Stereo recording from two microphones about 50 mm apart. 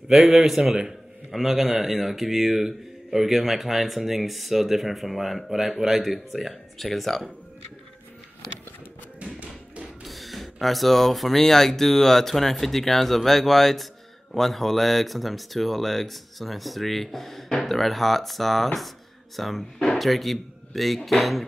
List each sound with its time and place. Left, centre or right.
0.1 s a man's voice: centre
9.2 s music: right
10.0 s a man's voice: centre